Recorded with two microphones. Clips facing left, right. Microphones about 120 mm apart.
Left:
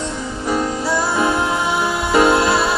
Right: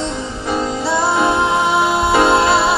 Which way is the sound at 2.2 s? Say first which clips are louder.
Right 2 dB; 25° right (ahead or behind).